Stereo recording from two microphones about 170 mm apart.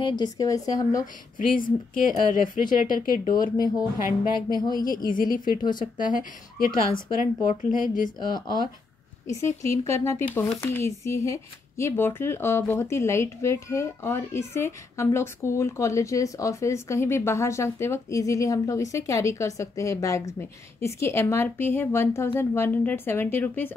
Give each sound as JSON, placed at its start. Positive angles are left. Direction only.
{"t": 0.0, "sound": "a woman's voice", "side_deg": 25}
{"t": 1.4, "sound": "a woman's voice", "side_deg": 55}
{"t": 4.3, "sound": "a sound", "side_deg": -25}
{"t": 4.8, "sound": "a woman's voice", "side_deg": 55}
{"t": 6.7, "sound": "a sound", "side_deg": -20}
{"t": 7.2, "sound": "a woman's voice", "side_deg": 50}
{"t": 8.2, "sound": "a woman's voice", "side_deg": 25}